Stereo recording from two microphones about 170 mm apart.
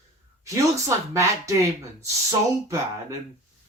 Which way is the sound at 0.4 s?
20° right (ahead or behind).